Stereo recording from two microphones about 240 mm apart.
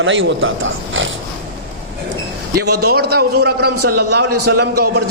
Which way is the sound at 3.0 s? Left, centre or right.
Right.